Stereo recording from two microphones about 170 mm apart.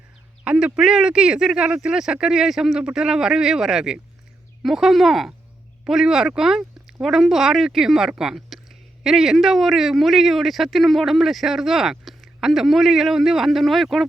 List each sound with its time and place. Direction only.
0.4 s speech: 5° right (ahead or behind)